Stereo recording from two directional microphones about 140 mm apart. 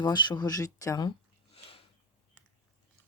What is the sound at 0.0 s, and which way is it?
Speech, 30° left (ahead or behind).